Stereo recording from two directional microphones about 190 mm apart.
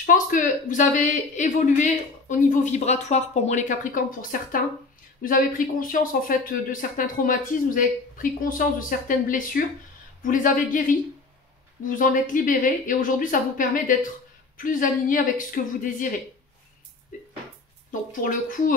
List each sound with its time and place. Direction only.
0.0 s speech: 45° left (ahead or behind)
18.1 s speech: 45° left (ahead or behind)